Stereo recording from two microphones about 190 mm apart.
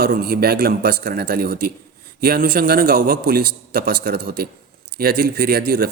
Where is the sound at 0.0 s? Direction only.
55° right (ahead or behind).